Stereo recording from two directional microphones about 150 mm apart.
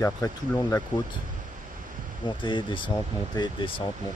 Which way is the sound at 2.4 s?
35° left (ahead or behind).